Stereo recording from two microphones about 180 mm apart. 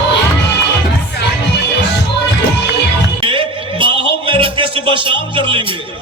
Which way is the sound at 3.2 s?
30° right (ahead or behind).